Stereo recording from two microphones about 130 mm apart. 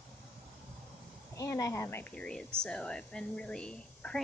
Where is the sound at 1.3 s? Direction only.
25° left (ahead or behind).